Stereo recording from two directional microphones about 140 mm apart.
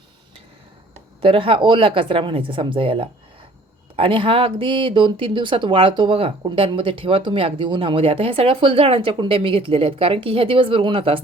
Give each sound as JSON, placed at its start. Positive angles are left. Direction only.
{"t": 1.2, "sound": "speech", "side_deg": -40}